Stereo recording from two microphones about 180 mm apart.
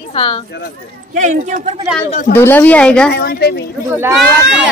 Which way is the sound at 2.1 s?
50° left (ahead or behind).